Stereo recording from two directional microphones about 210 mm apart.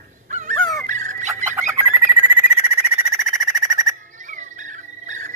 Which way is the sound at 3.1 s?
Centre (ahead or behind).